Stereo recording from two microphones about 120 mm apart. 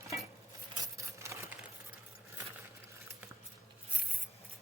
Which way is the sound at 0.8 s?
25° right (ahead or behind).